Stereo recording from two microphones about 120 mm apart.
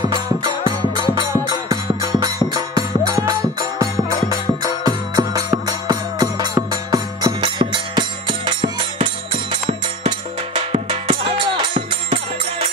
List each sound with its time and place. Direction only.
0.7 s music: 35° right (ahead or behind)
4.8 s music: 30° right (ahead or behind)